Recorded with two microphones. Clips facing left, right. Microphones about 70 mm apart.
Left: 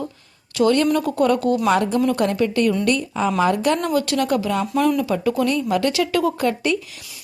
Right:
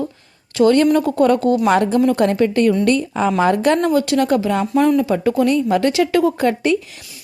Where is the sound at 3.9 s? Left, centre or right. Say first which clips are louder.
Right 4 dB; right.